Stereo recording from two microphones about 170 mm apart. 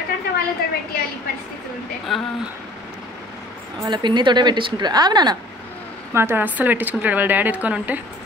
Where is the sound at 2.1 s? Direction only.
Centre (ahead or behind).